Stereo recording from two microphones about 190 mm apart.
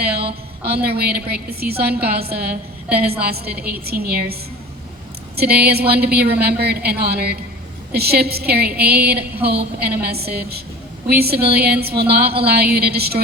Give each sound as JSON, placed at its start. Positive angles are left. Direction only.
{"t": 0.6, "sound": "a woman's voice", "side_deg": -55}
{"t": 5.4, "sound": "a woman's voice", "side_deg": -55}